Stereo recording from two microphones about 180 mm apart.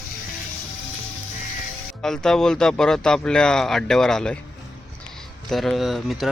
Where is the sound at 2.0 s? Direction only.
5° left (ahead or behind).